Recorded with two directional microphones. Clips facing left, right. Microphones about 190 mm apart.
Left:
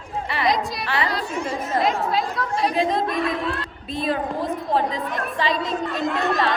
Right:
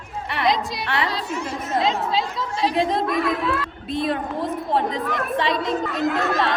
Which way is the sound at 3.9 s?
65° right (ahead or behind).